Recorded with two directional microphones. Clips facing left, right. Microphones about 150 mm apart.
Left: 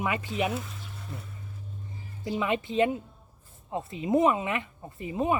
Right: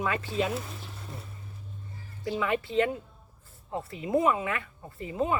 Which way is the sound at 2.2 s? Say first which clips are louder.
Even; 20° left (ahead or behind).